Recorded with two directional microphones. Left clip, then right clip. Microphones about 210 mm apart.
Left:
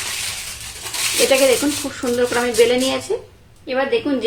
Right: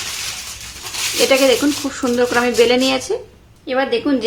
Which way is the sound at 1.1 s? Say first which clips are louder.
Right 1 dB; 15° right (ahead or behind).